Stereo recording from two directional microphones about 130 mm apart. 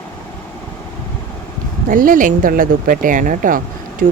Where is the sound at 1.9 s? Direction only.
90° right.